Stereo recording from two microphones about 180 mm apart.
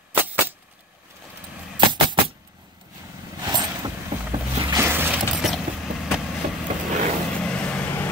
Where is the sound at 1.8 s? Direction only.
25° right (ahead or behind).